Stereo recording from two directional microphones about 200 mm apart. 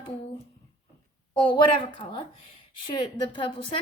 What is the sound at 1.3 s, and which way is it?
Speech, 25° left (ahead or behind).